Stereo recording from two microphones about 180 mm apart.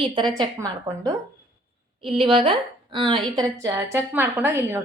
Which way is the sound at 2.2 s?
30° right (ahead or behind).